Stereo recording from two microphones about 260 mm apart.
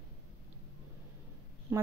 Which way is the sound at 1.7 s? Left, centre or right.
Centre.